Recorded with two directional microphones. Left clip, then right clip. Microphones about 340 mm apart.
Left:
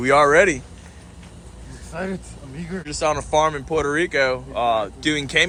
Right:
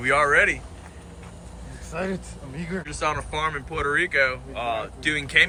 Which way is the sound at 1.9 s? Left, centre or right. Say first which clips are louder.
Even; centre.